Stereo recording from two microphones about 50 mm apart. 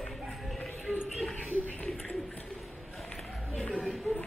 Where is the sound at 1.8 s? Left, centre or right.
Left.